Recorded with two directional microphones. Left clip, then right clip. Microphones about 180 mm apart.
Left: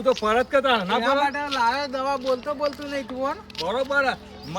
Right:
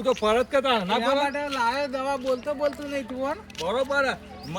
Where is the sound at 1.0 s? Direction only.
Centre (ahead or behind).